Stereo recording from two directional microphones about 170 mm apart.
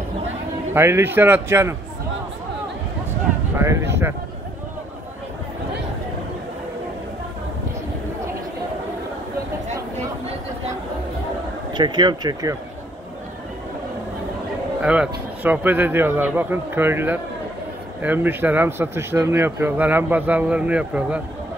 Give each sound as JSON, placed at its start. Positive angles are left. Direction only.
{"t": 0.7, "sound": "speech", "side_deg": -15}
{"t": 3.5, "sound": "a sound", "side_deg": -15}
{"t": 11.7, "sound": "speech", "side_deg": -25}
{"t": 14.8, "sound": "speech", "side_deg": -5}